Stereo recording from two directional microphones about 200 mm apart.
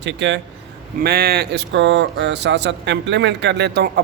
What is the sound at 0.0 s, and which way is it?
Speech, 60° right (ahead or behind).